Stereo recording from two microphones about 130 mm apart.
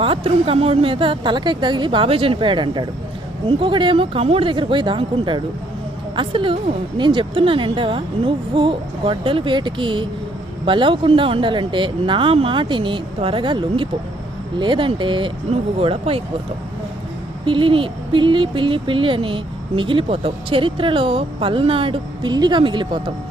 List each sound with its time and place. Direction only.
0.0 s speech: 45° right (ahead or behind)
17.4 s speech: 40° right (ahead or behind)